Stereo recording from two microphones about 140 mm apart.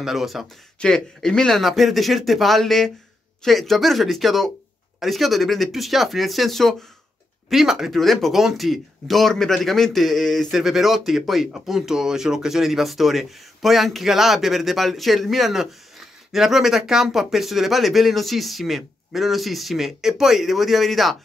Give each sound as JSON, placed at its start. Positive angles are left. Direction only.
{"t": 0.0, "sound": "speech", "side_deg": 0}